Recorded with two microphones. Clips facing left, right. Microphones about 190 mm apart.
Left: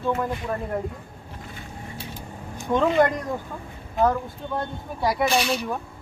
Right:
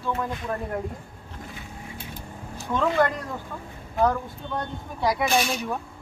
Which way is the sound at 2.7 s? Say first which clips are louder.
Left 3 dB; 20° left (ahead or behind).